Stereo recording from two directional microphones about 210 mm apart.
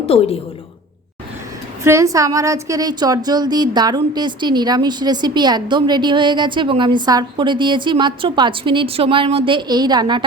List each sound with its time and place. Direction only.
0.0 s a woman's voice: 25° left (ahead or behind)
1.8 s a woman's voice: 15° right (ahead or behind)